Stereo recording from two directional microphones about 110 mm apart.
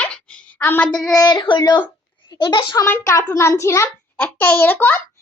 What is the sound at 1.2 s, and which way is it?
Child singing, 40° left (ahead or behind).